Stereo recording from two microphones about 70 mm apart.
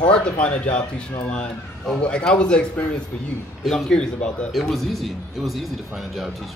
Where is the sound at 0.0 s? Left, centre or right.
Centre.